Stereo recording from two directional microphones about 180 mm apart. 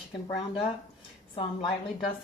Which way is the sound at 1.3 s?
30° left (ahead or behind).